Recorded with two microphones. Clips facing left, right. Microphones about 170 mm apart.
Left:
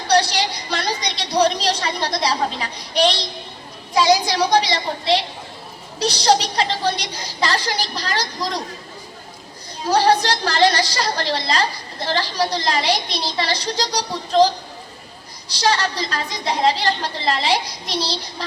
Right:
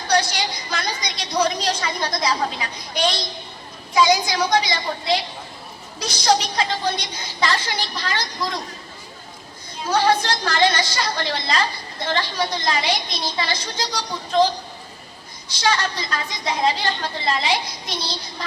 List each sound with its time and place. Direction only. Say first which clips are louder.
0.1 s a sound: left 3 dB; 35° left (ahead or behind)
3.9 s a woman's voice: left 1 dB; 30° left (ahead or behind)
9.8 s a woman's voice: left 3 dB; 35° left (ahead or behind)
15.6 s a woman's voice: left 2 dB; 35° left (ahead or behind)